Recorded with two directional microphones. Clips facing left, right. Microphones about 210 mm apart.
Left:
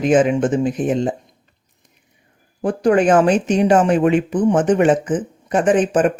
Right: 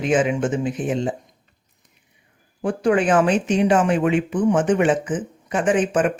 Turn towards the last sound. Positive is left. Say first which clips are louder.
# left 4 dB
turn(degrees=40)  # may be behind; listen again after turning